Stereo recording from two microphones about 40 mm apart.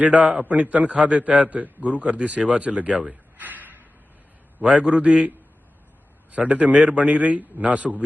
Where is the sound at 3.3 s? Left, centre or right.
Right.